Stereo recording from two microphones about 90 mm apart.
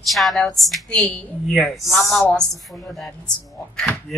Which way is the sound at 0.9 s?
15° left (ahead or behind).